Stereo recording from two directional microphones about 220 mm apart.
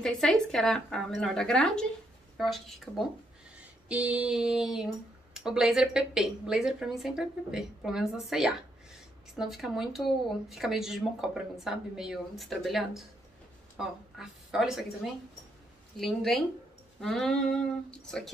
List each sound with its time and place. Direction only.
0.0 s a woman's voice: centre (ahead or behind)
16.0 s speech: centre (ahead or behind)